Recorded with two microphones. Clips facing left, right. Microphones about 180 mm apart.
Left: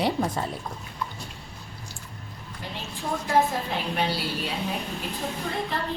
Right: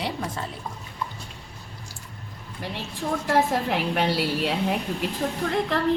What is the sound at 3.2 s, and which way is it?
A woman's voice, 80° right.